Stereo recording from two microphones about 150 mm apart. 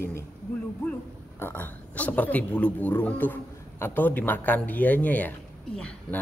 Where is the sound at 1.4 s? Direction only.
15° left (ahead or behind).